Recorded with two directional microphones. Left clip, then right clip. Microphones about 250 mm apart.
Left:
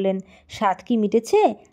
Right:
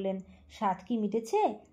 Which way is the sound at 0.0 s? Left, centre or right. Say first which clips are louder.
Left 11 dB; left.